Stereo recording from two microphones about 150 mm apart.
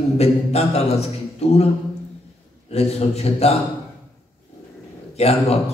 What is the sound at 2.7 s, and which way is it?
Speech, 45° left (ahead or behind).